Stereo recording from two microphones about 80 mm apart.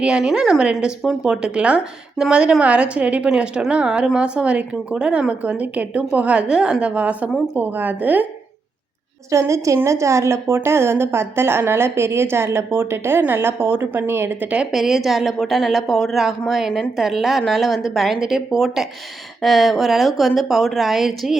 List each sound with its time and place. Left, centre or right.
0.0 s speech: centre
9.3 s a woman's voice: right
14.7 s a woman's voice: centre